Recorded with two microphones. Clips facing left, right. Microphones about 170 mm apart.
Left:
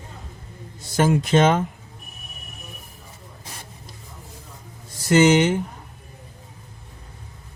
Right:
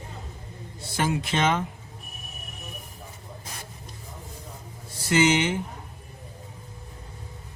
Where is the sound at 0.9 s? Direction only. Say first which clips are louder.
Left 8 dB; 45° left (ahead or behind).